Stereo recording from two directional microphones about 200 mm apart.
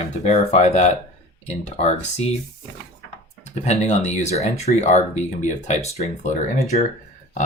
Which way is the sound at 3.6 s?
35° left (ahead or behind).